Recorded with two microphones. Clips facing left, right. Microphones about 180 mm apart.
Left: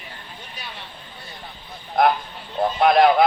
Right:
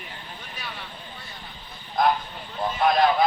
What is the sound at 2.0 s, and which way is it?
Speech, 60° left (ahead or behind).